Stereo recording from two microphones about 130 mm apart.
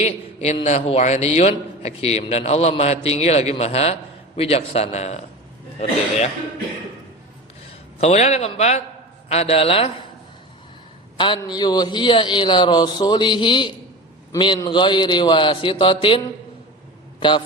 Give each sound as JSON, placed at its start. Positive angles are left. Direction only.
{"t": 0.0, "sound": "a man's voice", "side_deg": 55}
{"t": 8.0, "sound": "a man's voice", "side_deg": 60}
{"t": 11.4, "sound": "a man's voice", "side_deg": 30}